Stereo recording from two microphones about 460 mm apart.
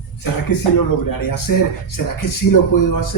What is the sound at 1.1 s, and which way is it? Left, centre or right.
Speech, left.